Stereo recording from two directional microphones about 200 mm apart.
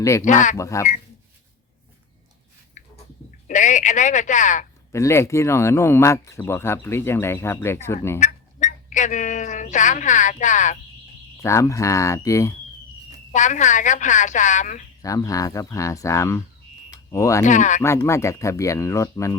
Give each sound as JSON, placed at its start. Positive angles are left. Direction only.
{"t": 0.0, "sound": "speech", "side_deg": 15}
{"t": 0.3, "sound": "a woman's voice", "side_deg": 40}
{"t": 0.5, "sound": "speech", "side_deg": 15}
{"t": 2.8, "sound": "a sound", "side_deg": 35}
{"t": 3.4, "sound": "a woman's voice", "side_deg": 40}
{"t": 4.9, "sound": "speech", "side_deg": 15}
{"t": 8.2, "sound": "speech", "side_deg": 40}
{"t": 11.4, "sound": "speech", "side_deg": 15}
{"t": 13.3, "sound": "a woman's voice", "side_deg": 40}
{"t": 15.0, "sound": "speech", "side_deg": 15}
{"t": 17.4, "sound": "a woman's voice", "side_deg": 40}
{"t": 17.8, "sound": "speech", "side_deg": 15}